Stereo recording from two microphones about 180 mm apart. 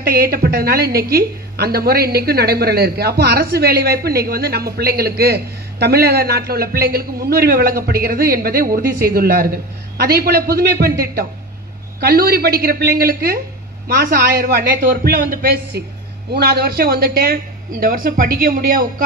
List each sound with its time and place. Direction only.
0.0 s a woman's voice: 60° right (ahead or behind)